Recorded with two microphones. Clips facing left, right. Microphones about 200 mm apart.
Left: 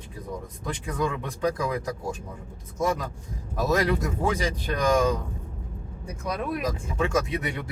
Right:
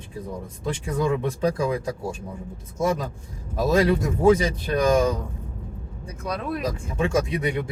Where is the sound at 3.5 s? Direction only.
25° right (ahead or behind).